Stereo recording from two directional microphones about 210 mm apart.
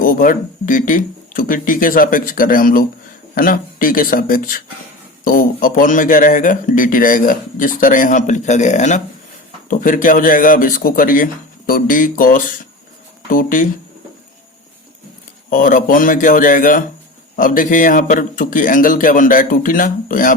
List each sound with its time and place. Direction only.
0.0 s speech: 40° left (ahead or behind)
15.4 s speech: 40° left (ahead or behind)